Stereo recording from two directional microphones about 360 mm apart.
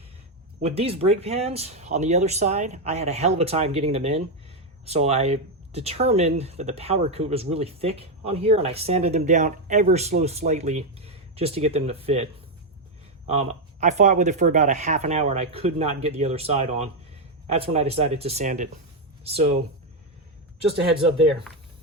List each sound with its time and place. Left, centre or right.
0.6 s speech: centre